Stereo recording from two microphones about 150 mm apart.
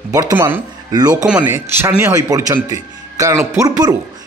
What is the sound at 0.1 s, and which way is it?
Speech, 20° right (ahead or behind).